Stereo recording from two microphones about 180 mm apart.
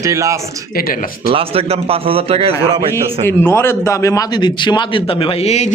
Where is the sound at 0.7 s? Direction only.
55° left (ahead or behind).